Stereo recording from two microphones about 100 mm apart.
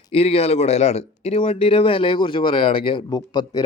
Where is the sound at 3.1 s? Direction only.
45° left (ahead or behind).